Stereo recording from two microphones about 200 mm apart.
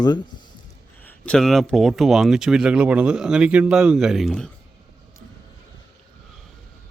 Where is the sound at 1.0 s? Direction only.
5° left (ahead or behind).